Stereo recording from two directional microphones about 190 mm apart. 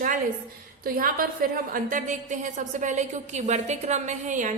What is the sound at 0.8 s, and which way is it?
A woman's voice, 50° right (ahead or behind).